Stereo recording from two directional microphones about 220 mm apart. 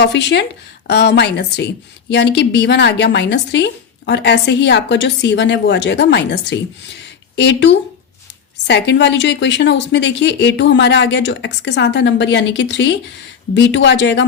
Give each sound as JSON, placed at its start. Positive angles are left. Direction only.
{"t": 0.0, "sound": "a woman's voice", "side_deg": 50}
{"t": 7.0, "sound": "a sound", "side_deg": 50}
{"t": 8.6, "sound": "a woman's voice", "side_deg": 55}